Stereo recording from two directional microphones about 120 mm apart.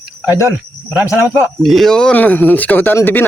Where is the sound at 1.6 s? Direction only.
Centre (ahead or behind); by 3.3 s 15° left (ahead or behind).